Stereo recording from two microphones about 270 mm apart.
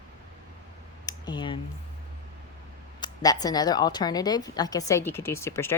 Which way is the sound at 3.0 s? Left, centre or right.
Centre.